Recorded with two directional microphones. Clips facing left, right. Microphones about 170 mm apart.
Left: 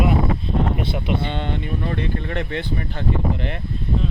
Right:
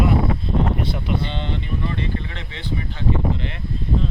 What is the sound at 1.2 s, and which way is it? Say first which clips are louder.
Speech: left 2 dB; 55° left (ahead or behind).